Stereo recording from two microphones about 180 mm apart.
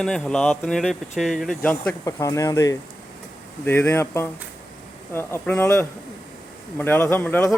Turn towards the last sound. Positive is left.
turn(degrees=10)  # may be behind; listen again after turning